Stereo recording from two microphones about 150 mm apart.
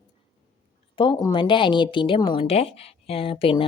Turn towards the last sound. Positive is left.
turn(degrees=35)  # may be behind; listen again after turning